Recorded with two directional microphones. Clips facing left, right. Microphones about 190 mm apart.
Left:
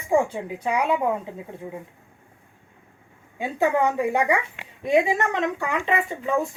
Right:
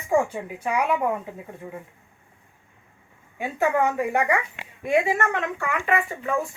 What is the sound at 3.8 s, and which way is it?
A woman's voice, 15° left (ahead or behind).